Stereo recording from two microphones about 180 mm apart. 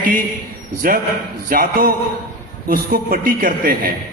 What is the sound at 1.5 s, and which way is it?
A man's voice, 50° right (ahead or behind).